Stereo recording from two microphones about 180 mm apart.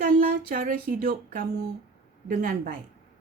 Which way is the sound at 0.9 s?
55° right (ahead or behind).